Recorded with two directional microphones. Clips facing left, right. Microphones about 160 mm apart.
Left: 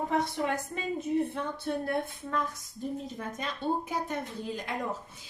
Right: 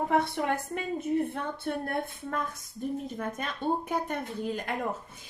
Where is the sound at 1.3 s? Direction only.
55° right (ahead or behind).